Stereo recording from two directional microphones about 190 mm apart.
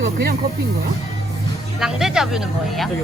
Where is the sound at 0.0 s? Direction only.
60° right (ahead or behind).